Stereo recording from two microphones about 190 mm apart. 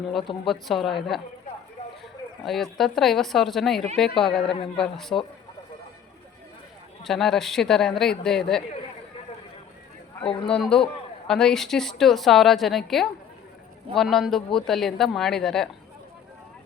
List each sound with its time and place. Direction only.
0.4 s a woman's voice: centre (ahead or behind)
2.4 s a woman's voice: centre (ahead or behind)
7.0 s a woman's voice: centre (ahead or behind)
10.2 s a man's voice: 30° left (ahead or behind)
10.5 s a woman's voice: 5° left (ahead or behind)